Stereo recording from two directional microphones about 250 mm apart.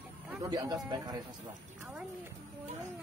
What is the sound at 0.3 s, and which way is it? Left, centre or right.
Speech, centre.